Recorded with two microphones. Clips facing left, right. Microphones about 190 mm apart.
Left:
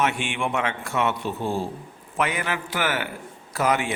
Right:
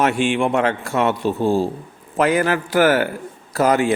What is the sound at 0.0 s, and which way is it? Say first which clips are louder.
A man's voice: right 7 dB; 35° right (ahead or behind).